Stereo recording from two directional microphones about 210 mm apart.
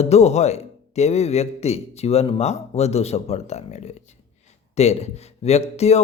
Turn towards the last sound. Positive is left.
turn(degrees=30)  # may be behind; listen again after turning